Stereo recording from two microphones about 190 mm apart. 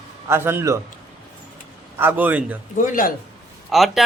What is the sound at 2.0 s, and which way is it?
Speech, 10° right (ahead or behind).